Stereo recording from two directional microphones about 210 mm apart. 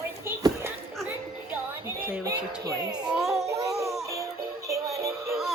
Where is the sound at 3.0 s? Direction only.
5° right (ahead or behind).